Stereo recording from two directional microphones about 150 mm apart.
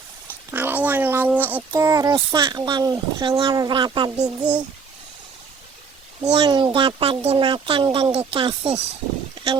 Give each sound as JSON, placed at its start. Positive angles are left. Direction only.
{"t": 0.5, "sound": "speech", "side_deg": -10}
{"t": 4.4, "sound": "speech", "side_deg": -10}
{"t": 6.3, "sound": "speech", "side_deg": -30}
{"t": 9.3, "sound": "a sound", "side_deg": -35}